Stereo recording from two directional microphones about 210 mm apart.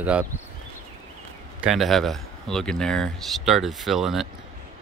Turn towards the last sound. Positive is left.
turn(degrees=0)  # may be behind; listen again after turning